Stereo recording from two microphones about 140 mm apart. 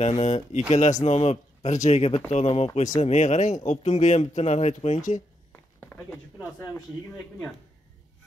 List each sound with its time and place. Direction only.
0.0 s speech: 50° left (ahead or behind)
5.5 s walk: 10° left (ahead or behind)